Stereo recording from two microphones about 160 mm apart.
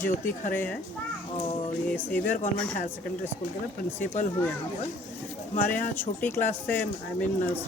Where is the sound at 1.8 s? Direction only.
10° left (ahead or behind).